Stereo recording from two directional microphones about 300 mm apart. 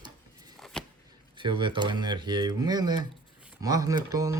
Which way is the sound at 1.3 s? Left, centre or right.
Centre.